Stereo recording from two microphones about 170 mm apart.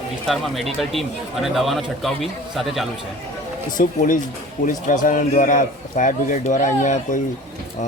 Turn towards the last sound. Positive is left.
turn(degrees=45)  # may be behind; listen again after turning